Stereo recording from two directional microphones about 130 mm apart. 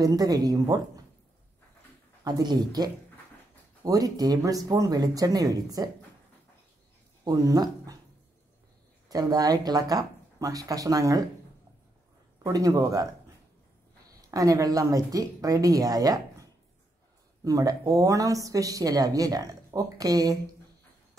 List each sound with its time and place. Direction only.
0.0 s speech: 30° right (ahead or behind)
2.2 s speech: 30° right (ahead or behind)
7.2 s speech: 30° right (ahead or behind)
9.1 s speech: 30° right (ahead or behind)
12.4 s speech: 25° right (ahead or behind)
14.3 s speech: 25° right (ahead or behind)
17.5 s speech: 30° right (ahead or behind)